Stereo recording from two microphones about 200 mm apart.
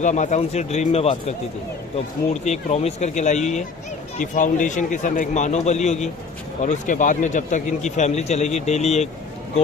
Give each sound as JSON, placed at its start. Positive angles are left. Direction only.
{"t": 0.0, "sound": "a man's voice", "side_deg": 35}
{"t": 2.4, "sound": "a man's voice", "side_deg": 35}